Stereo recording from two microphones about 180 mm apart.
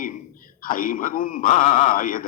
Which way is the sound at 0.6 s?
50° left (ahead or behind).